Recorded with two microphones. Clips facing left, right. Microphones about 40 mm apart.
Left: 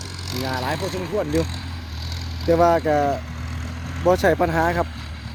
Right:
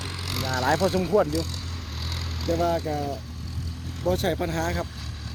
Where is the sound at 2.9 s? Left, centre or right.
Left.